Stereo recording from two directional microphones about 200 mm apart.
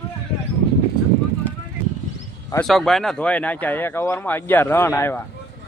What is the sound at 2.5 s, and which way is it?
Speech, 5° left (ahead or behind).